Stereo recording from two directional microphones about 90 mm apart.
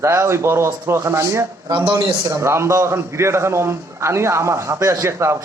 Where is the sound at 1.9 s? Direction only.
60° right (ahead or behind).